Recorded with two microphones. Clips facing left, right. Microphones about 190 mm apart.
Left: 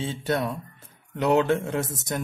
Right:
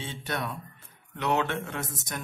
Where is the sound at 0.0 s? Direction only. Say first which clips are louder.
Left 7 dB; 35° left (ahead or behind).